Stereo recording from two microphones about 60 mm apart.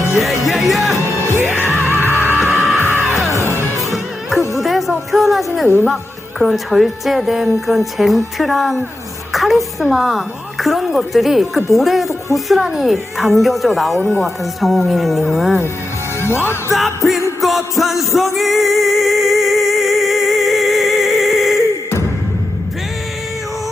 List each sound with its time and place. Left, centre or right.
0.2 s music: centre
0.9 s music: left
1.8 s music: right
2.4 s music: centre
3.2 s music: left
4.5 s music: centre
5.6 s a woman's voice: left
6.4 s speech: centre
9.3 s a sound: centre
9.9 s speech: centre
16.2 s music: left
16.7 s speech: centre
18.3 s music: centre